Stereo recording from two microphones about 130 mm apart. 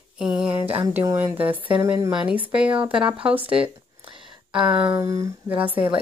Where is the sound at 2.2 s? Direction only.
10° right (ahead or behind).